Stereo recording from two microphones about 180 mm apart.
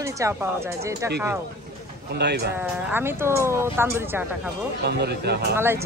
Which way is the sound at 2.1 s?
65° right (ahead or behind).